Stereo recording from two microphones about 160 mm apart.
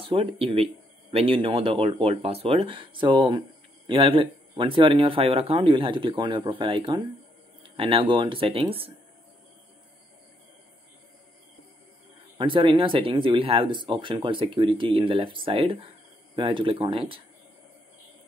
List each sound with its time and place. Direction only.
0.0 s speech: 35° right (ahead or behind)
12.4 s speech: 30° right (ahead or behind)